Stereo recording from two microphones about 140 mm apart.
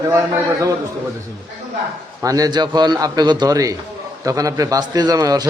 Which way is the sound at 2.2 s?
25° right (ahead or behind).